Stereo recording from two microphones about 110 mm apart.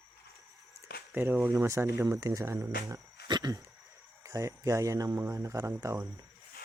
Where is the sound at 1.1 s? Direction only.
20° right (ahead or behind).